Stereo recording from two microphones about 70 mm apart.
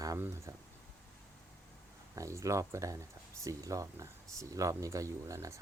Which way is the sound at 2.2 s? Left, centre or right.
Right.